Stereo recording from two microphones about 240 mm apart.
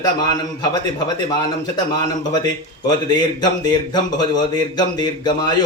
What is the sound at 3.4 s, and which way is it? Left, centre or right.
Speech, centre.